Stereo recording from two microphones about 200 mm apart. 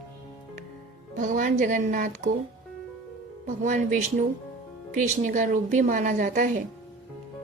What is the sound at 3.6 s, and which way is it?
A woman's voice, 40° right (ahead or behind).